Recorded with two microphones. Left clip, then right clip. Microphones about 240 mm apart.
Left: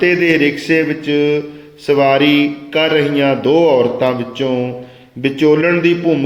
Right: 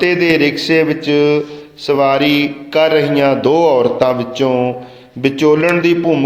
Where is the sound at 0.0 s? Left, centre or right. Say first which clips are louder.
Even; centre.